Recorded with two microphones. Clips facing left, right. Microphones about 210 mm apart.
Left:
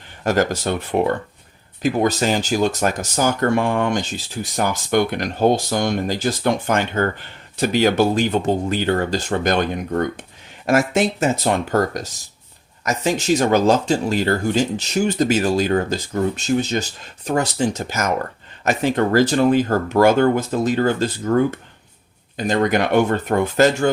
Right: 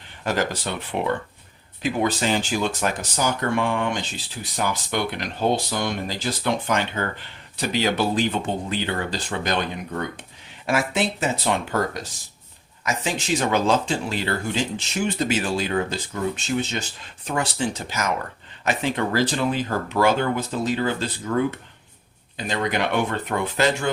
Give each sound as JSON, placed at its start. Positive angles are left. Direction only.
{"t": 0.3, "sound": "speech", "side_deg": 45}